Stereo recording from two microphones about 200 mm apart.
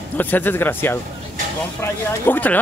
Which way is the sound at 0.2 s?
10° left (ahead or behind).